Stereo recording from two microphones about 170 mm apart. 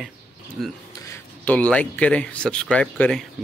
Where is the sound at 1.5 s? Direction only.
5° left (ahead or behind).